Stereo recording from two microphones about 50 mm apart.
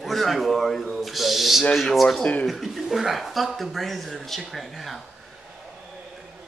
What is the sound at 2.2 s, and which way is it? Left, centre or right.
Speech, left.